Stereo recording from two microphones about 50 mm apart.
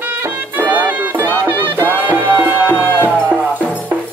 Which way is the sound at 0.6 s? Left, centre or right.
Right.